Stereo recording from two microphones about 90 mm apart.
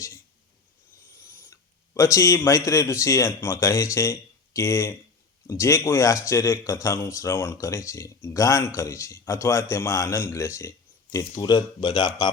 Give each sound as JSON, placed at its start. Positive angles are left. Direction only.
{"t": 1.5, "sound": "speech", "side_deg": 35}